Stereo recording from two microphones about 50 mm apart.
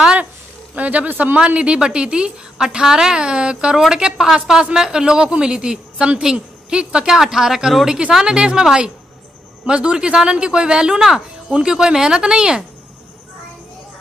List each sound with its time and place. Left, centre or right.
0.7 s speech: right
1.4 s speech: right
7.2 s speech: centre